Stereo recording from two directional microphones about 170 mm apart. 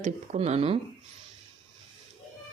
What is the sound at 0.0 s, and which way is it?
Speech, 40° right (ahead or behind).